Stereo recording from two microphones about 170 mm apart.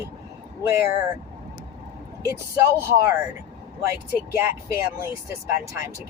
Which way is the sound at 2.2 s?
15° right (ahead or behind).